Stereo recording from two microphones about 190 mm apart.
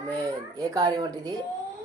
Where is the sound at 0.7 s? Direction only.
20° right (ahead or behind).